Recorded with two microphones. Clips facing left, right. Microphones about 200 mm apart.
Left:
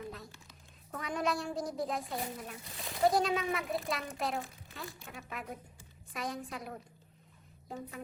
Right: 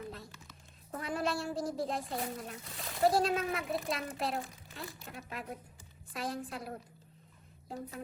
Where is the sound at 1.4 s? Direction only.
Centre (ahead or behind).